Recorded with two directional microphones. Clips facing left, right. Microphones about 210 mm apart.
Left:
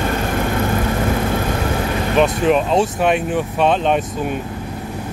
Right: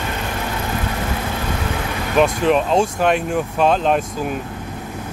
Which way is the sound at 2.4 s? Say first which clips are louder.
Left 1 dB; centre (ahead or behind).